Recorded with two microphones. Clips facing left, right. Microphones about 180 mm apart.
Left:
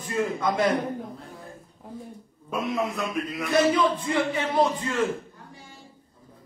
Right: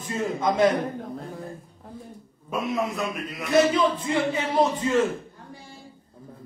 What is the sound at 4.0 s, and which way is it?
Speech, 25° right (ahead or behind).